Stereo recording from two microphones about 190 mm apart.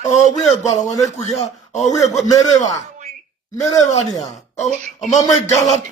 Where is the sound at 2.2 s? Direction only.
20° left (ahead or behind).